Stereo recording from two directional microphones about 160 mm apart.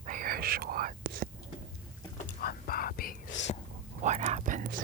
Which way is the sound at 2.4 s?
70° left (ahead or behind).